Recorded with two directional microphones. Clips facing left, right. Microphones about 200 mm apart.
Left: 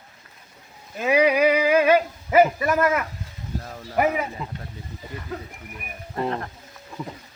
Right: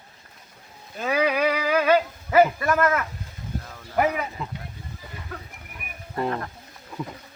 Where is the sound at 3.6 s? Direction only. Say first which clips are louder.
Left 5 dB; 35° left (ahead or behind).